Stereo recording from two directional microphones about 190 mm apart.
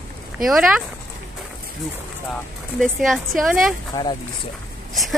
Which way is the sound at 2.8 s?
Centre (ahead or behind).